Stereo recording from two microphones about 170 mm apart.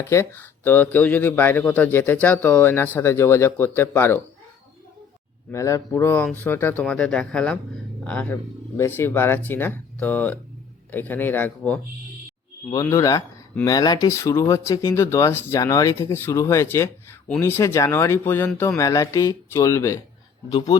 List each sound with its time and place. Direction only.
0.0 s speech: 15° left (ahead or behind)
5.5 s speech: 15° left (ahead or behind)
20.5 s speech: 30° left (ahead or behind)